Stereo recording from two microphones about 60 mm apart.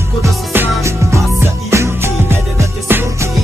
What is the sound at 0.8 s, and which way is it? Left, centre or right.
Music, right.